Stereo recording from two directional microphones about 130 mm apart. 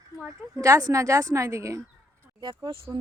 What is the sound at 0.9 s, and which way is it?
Speech, 25° right (ahead or behind).